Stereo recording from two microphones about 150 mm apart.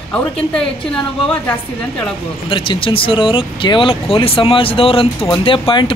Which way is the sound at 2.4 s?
35° left (ahead or behind).